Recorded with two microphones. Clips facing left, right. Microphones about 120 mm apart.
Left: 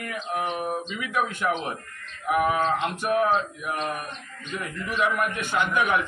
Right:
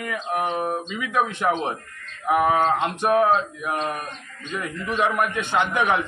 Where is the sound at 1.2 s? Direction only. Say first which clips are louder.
Right 4 dB; 25° right (ahead or behind).